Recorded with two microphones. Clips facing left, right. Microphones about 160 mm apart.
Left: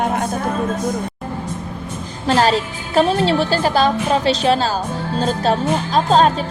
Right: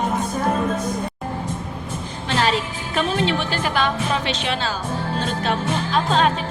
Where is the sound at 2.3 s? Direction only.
40° left (ahead or behind).